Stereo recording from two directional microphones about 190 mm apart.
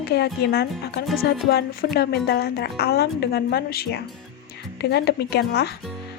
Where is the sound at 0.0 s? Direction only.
60° left (ahead or behind).